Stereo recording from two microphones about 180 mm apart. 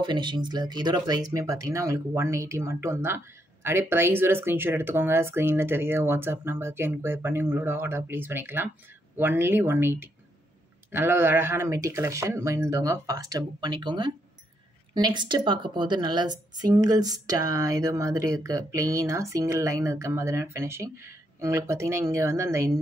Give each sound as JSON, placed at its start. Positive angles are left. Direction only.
{"t": 0.0, "sound": "speech", "side_deg": -25}